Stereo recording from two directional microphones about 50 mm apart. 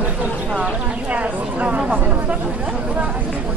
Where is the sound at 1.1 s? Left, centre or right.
Right.